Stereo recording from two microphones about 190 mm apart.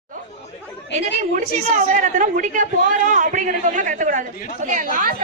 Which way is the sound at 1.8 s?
40° right (ahead or behind).